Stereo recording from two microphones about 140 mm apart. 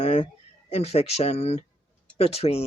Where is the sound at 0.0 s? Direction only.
55° left (ahead or behind).